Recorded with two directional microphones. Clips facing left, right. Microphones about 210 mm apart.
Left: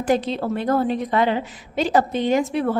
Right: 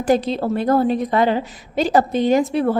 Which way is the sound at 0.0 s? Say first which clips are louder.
Right 3 dB; 40° right (ahead or behind).